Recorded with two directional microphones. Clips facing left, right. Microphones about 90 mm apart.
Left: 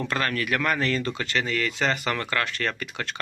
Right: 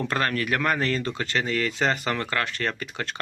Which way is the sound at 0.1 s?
30° right (ahead or behind).